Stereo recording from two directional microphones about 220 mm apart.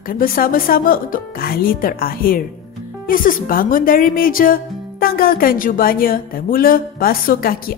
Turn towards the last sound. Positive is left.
turn(degrees=40)  # may be behind; listen again after turning